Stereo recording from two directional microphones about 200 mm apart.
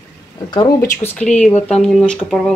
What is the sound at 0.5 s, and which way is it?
Speech, 15° left (ahead or behind).